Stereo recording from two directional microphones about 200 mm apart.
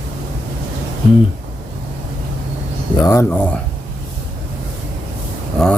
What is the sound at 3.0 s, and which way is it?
Speech, 15° left (ahead or behind).